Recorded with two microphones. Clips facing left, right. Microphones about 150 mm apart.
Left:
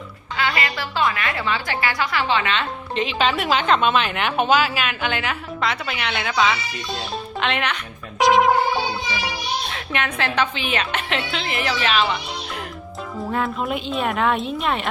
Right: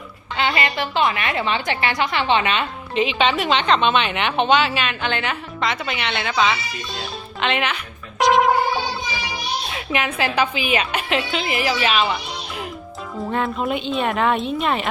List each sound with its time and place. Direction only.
0.3 s a woman's voice: 25° right (ahead or behind)
2.9 s a woman's voice: 5° right (ahead or behind)
8.2 s music: centre (ahead or behind)
9.6 s a woman's voice: 5° right (ahead or behind)
13.1 s a woman's voice: centre (ahead or behind)